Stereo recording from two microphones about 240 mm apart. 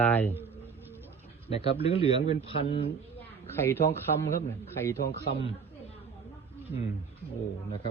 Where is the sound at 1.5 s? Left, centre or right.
Left.